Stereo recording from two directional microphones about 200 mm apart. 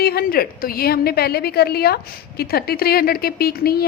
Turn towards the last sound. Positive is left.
turn(degrees=50)  # may be behind; listen again after turning